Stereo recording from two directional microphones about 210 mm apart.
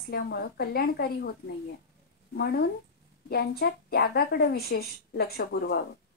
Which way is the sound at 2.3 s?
50° left (ahead or behind).